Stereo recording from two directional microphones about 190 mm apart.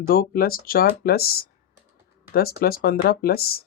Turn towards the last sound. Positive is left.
turn(degrees=55)  # may be behind; listen again after turning